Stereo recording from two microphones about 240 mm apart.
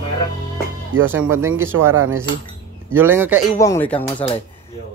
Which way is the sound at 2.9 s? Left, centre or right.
Centre.